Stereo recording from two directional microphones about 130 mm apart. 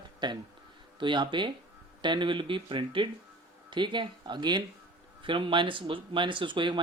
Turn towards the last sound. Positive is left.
turn(degrees=-40)  # may be behind; listen again after turning